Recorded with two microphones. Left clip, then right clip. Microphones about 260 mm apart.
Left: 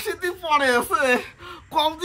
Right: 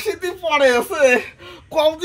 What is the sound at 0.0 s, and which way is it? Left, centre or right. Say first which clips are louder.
A woman's voice: right 4 dB; centre.